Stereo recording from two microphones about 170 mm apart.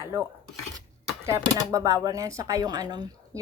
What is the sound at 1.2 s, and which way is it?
A woman's voice, 15° right (ahead or behind).